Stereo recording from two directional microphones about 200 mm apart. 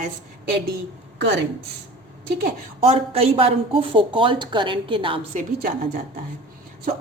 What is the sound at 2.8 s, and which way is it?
Speech, 30° right (ahead or behind).